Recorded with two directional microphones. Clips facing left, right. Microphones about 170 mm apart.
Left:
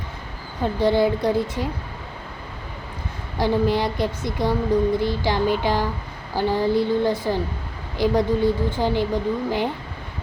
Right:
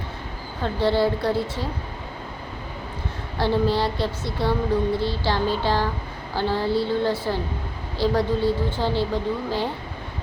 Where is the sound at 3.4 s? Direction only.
15° left (ahead or behind).